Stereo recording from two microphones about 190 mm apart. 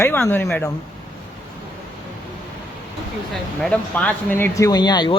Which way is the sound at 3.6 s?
5° left (ahead or behind).